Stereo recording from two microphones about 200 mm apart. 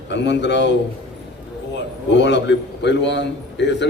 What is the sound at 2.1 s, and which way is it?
A man's voice, 60° left (ahead or behind).